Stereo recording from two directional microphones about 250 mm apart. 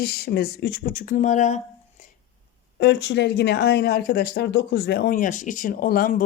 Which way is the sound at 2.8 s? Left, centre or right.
Left.